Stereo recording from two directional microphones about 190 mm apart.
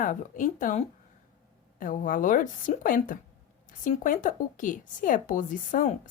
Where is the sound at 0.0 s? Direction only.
40° left (ahead or behind).